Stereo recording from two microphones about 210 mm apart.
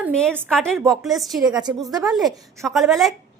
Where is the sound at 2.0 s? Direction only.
Centre (ahead or behind).